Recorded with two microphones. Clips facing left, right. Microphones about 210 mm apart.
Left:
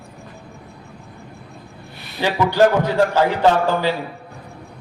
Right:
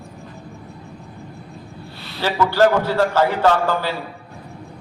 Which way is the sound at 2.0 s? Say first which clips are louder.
Left 1 dB; 15° left (ahead or behind).